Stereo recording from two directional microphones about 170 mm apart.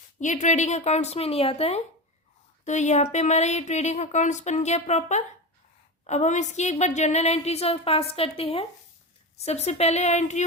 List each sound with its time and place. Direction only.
0.2 s a woman's voice: 45° left (ahead or behind)